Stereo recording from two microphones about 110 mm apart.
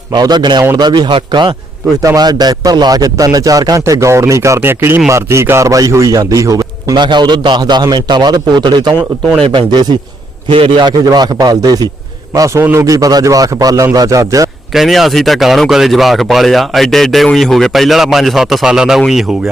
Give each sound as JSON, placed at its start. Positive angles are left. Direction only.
{"t": 0.1, "sound": "speech", "side_deg": -40}
{"t": 2.0, "sound": "speech", "side_deg": -35}
{"t": 6.9, "sound": "speech", "side_deg": -45}
{"t": 14.7, "sound": "speech", "side_deg": 0}